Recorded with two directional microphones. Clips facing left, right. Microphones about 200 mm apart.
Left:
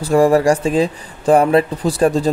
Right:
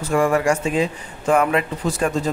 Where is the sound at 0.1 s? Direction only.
35° left (ahead or behind).